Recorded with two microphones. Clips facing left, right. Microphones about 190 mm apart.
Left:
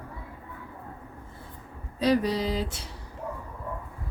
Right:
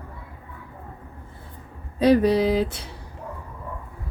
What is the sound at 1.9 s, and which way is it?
Speech, 60° right (ahead or behind).